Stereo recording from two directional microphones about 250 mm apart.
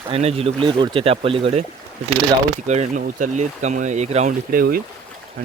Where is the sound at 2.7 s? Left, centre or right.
Right.